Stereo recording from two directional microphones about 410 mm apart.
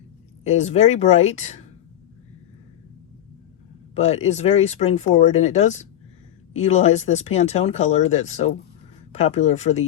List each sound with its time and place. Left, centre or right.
0.4 s speech: centre
3.9 s speech: centre